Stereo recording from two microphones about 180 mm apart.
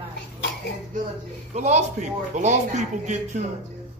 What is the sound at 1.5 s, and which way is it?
Speech, 40° right (ahead or behind).